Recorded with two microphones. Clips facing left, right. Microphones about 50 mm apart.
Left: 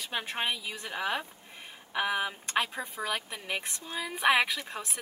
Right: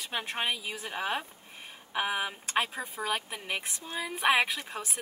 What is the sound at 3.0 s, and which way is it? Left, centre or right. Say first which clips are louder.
Speech: right 1 dB; centre.